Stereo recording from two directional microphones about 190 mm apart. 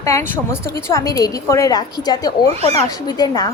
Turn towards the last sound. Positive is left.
turn(degrees=20)  # may be behind; listen again after turning